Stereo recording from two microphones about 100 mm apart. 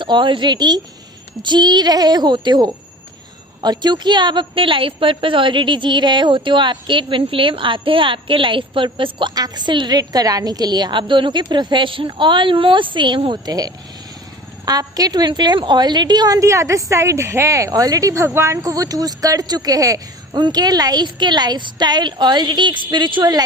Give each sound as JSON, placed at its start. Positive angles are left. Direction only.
{"t": 0.0, "sound": "a woman's voice", "side_deg": -50}
{"t": 13.4, "sound": "a woman's voice", "side_deg": -40}